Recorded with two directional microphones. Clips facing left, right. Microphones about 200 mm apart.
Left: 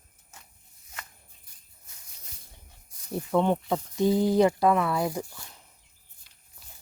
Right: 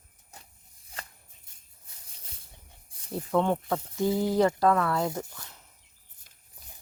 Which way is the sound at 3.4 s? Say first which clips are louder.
Left 2 dB; 15° left (ahead or behind).